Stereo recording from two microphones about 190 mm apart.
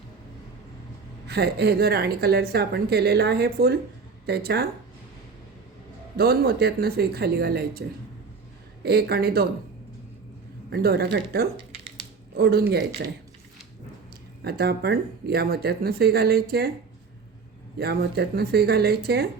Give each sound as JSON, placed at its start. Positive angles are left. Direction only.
{"t": 1.3, "sound": "a woman's voice", "side_deg": -55}
{"t": 6.1, "sound": "a woman's voice", "side_deg": -55}
{"t": 10.7, "sound": "a woman's voice", "side_deg": -55}
{"t": 11.5, "sound": "a sound", "side_deg": -25}
{"t": 12.4, "sound": "a woman's voice", "side_deg": -55}
{"t": 14.4, "sound": "a woman's voice", "side_deg": -55}
{"t": 17.7, "sound": "a woman's voice", "side_deg": -55}